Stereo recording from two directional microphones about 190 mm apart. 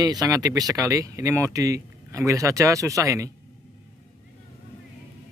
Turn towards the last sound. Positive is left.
turn(degrees=-15)  # may be behind; listen again after turning